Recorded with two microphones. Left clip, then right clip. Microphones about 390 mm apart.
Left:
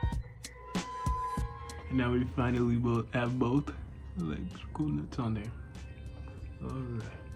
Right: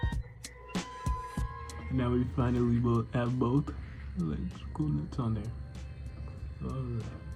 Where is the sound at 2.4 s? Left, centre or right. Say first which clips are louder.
Right 1 dB; centre.